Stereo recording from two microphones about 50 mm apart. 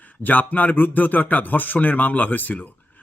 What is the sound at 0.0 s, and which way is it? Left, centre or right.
A man's voice, left.